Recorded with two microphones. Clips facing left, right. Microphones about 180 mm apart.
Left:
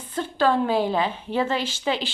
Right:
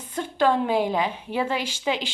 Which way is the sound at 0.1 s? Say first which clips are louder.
Even; 15° right (ahead or behind).